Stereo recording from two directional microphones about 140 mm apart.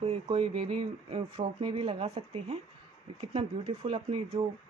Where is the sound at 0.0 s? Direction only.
45° right (ahead or behind).